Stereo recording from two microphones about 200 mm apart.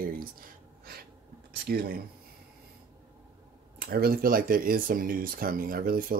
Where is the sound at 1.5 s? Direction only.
50° right (ahead or behind).